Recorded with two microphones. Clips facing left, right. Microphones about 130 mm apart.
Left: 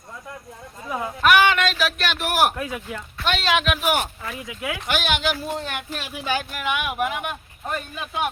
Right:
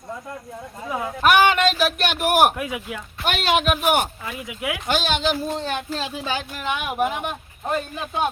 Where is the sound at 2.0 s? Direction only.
50° right (ahead or behind).